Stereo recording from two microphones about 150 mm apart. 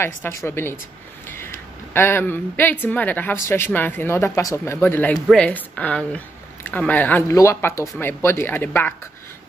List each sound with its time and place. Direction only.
0.0 s a woman's voice: 15° left (ahead or behind)